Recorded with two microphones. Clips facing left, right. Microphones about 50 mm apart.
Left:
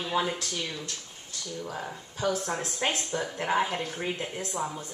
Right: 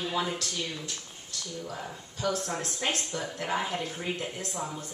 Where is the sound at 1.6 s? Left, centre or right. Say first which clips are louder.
Left 4 dB; left.